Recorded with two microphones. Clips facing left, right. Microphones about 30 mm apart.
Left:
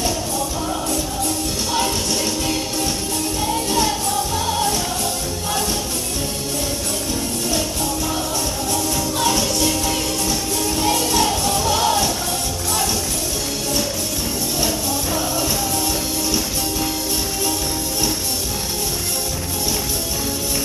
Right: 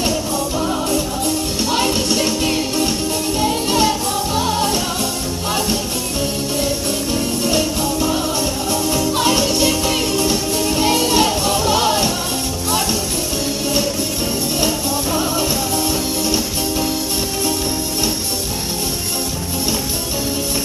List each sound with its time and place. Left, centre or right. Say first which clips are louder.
2.0 s music: right 4 dB; right
7.4 s music: right 4 dB; right